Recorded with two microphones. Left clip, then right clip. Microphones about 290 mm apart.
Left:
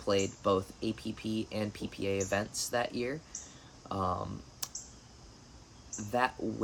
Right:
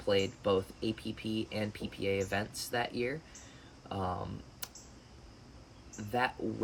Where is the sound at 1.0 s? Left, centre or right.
Left.